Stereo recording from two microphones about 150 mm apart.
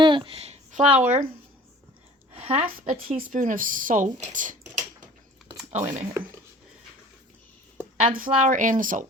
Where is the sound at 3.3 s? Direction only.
60° right (ahead or behind).